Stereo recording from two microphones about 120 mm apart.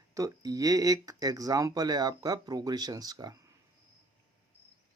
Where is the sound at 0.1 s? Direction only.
30° right (ahead or behind).